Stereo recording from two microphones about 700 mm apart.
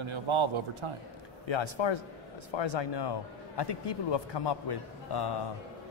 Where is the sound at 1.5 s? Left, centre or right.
Left.